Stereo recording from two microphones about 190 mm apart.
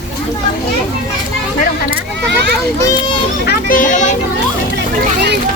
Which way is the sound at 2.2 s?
60° right (ahead or behind).